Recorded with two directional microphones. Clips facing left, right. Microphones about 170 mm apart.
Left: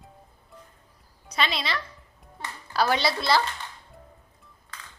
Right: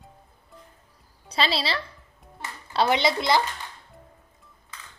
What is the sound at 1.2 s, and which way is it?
Speech, 30° right (ahead or behind).